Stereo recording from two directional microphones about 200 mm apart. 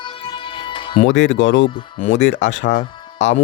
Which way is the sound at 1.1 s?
60° left (ahead or behind).